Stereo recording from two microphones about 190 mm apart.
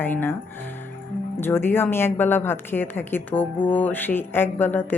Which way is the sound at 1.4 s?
10° left (ahead or behind).